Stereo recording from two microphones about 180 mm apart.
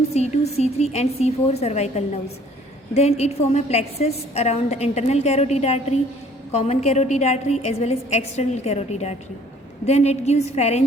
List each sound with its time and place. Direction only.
0.1 s a woman's voice: 35° left (ahead or behind)